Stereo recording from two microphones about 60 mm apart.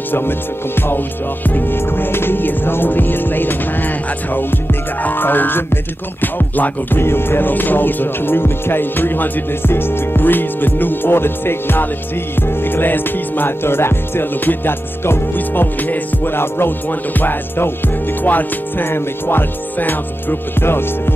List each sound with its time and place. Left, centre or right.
0.1 s music: left